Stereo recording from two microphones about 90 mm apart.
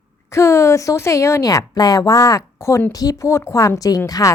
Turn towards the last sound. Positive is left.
turn(degrees=45)  # may be behind; listen again after turning